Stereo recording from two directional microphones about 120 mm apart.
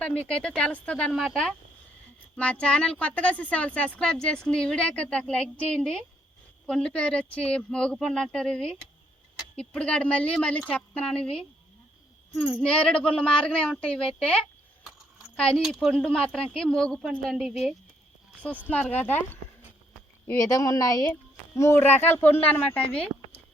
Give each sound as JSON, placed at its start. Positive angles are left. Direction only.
{"t": 0.3, "sound": "speech", "side_deg": 5}
{"t": 1.1, "sound": "a woman's voice", "side_deg": 0}
{"t": 12.6, "sound": "speech", "side_deg": 10}
{"t": 15.6, "sound": "a woman's voice", "side_deg": -5}
{"t": 18.7, "sound": "speech", "side_deg": 15}
{"t": 20.3, "sound": "a woman's voice", "side_deg": 30}